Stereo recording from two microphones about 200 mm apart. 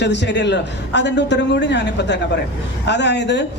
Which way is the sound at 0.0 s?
60° left (ahead or behind).